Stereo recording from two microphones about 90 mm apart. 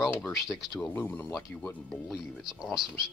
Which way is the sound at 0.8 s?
20° left (ahead or behind).